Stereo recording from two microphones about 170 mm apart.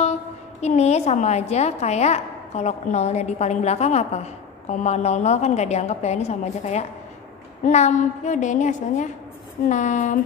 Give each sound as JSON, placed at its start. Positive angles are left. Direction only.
{"t": 0.0, "sound": "a woman's voice", "side_deg": 40}